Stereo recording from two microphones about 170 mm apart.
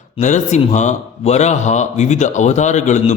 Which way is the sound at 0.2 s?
45° left (ahead or behind).